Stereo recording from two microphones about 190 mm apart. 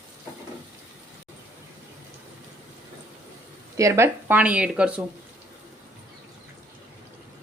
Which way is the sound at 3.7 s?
15° right (ahead or behind).